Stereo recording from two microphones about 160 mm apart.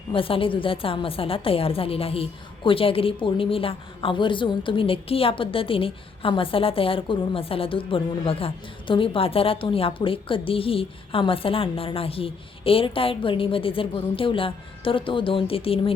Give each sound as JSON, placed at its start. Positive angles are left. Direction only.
{"t": 0.1, "sound": "a woman's voice", "side_deg": 35}